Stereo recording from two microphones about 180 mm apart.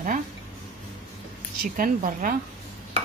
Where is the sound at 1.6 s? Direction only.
50° right (ahead or behind).